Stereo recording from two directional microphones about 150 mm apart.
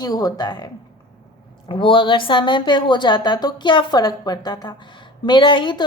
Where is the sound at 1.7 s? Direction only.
35° left (ahead or behind).